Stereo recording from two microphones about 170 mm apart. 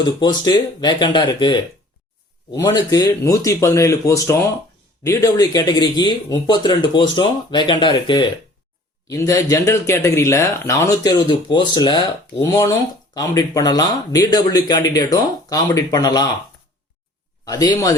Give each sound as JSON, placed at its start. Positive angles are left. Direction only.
{"t": 0.0, "sound": "speech", "side_deg": 25}
{"t": 17.4, "sound": "speech", "side_deg": 20}